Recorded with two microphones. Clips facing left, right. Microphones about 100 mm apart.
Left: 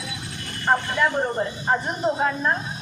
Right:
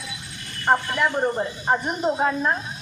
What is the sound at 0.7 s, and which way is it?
Speech, 15° right (ahead or behind).